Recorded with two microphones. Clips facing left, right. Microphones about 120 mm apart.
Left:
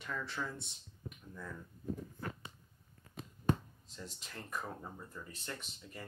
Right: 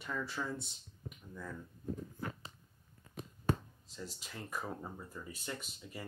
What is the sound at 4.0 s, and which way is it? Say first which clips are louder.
Speech: right 2 dB; 5° right (ahead or behind).